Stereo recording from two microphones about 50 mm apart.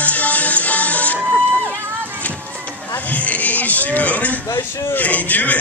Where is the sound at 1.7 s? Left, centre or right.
Right.